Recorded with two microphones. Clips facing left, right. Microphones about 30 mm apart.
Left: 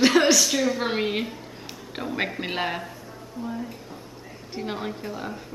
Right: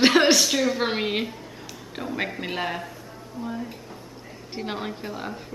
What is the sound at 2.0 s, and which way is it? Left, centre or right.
Speech, centre.